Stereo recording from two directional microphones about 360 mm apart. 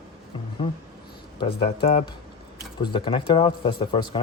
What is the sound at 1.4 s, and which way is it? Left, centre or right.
A man's voice, centre.